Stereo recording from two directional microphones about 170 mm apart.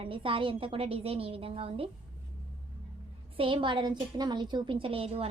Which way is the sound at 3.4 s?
30° right (ahead or behind).